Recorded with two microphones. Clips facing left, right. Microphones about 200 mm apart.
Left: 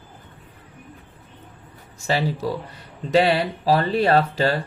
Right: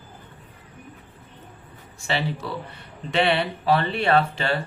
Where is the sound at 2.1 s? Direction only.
40° left (ahead or behind).